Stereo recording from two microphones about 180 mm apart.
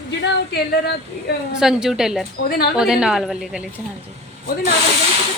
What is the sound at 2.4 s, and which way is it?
Speech, 60° left (ahead or behind).